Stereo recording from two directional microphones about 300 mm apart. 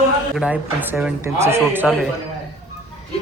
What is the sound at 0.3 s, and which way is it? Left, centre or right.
A woman's voice, centre.